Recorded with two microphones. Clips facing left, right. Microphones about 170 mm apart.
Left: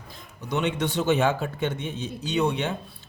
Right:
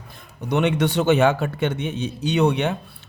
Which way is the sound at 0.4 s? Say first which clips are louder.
Right 6 dB; 65° right (ahead or behind).